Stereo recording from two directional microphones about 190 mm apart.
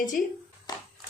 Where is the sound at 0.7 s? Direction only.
20° left (ahead or behind).